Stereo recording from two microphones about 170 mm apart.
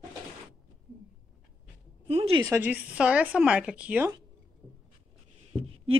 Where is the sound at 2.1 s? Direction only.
35° right (ahead or behind).